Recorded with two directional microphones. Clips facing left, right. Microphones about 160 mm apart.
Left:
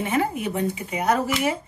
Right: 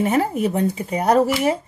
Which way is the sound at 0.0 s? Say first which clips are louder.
Right 5 dB; 40° right (ahead or behind).